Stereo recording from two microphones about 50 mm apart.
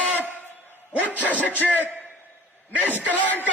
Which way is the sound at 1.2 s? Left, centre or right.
Left.